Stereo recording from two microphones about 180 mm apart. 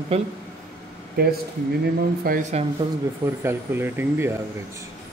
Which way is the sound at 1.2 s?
55° right (ahead or behind).